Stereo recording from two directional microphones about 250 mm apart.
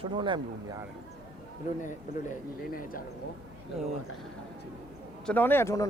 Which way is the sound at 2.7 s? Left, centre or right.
Left.